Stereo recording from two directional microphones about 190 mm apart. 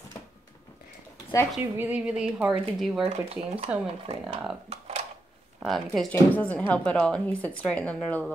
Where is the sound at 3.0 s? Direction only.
30° right (ahead or behind).